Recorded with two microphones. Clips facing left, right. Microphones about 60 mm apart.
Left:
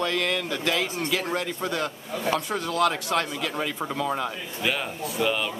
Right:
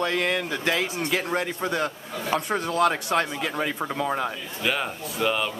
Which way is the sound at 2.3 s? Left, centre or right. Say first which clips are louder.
Right 4 dB; right.